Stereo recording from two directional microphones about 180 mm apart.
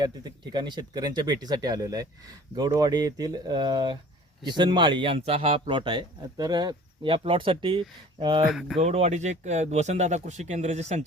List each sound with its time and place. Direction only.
0.0 s speech: 25° right (ahead or behind)
8.4 s speech: centre (ahead or behind)
8.8 s speech: 35° right (ahead or behind)